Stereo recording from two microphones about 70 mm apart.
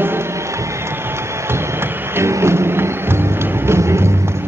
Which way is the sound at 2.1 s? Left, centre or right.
Right.